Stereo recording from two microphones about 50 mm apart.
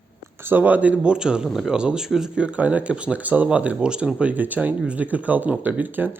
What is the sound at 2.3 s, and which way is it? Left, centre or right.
Speech, right.